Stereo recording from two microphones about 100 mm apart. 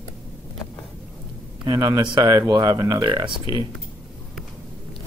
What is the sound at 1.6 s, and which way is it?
Speech, 45° right (ahead or behind).